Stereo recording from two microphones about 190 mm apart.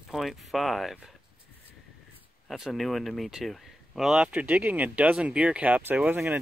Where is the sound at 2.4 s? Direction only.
Centre (ahead or behind).